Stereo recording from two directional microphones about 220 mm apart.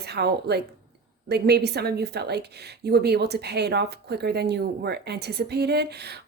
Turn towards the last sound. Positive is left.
turn(degrees=-50)  # may be behind; listen again after turning